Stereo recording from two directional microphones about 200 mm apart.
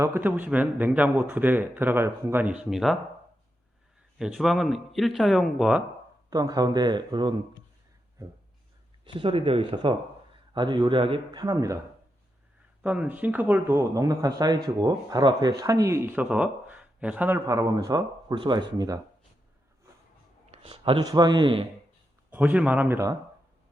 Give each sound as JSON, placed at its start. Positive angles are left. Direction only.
{"t": 0.0, "sound": "speech", "side_deg": -10}
{"t": 4.2, "sound": "speech", "side_deg": 0}
{"t": 6.3, "sound": "speech", "side_deg": -20}
{"t": 9.0, "sound": "speech", "side_deg": -25}
{"t": 12.8, "sound": "speech", "side_deg": -5}
{"t": 20.5, "sound": "speech", "side_deg": -30}
{"t": 22.3, "sound": "speech", "side_deg": -5}